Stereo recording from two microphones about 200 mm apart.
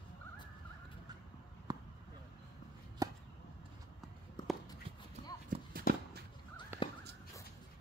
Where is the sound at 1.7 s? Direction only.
20° right (ahead or behind).